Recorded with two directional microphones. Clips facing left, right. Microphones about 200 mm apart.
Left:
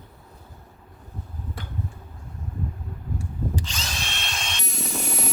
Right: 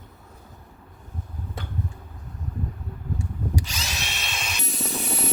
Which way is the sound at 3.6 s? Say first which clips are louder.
Right 1 dB; 10° right (ahead or behind).